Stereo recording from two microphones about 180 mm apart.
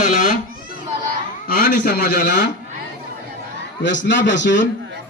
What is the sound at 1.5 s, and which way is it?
Speech, 65° left (ahead or behind).